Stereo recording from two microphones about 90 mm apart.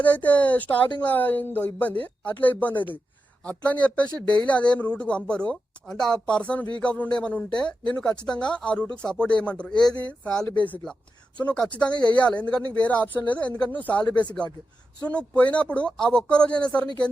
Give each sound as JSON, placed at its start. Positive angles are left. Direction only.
{"t": 0.0, "sound": "speech", "side_deg": 15}